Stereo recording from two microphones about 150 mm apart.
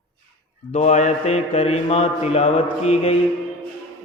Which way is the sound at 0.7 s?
50° left (ahead or behind).